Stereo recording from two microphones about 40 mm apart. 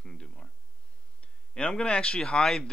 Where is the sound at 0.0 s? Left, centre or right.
Left.